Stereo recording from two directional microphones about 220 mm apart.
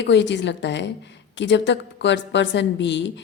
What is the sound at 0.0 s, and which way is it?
A woman's voice, 55° left (ahead or behind).